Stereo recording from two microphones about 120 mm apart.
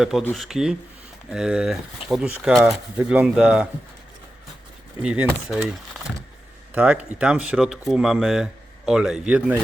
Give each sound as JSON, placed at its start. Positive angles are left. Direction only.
{"t": 0.0, "sound": "speech", "side_deg": -5}
{"t": 4.9, "sound": "speech", "side_deg": -10}
{"t": 6.7, "sound": "speech", "side_deg": -10}